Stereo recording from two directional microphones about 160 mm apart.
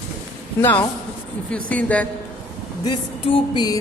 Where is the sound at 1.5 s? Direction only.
10° left (ahead or behind).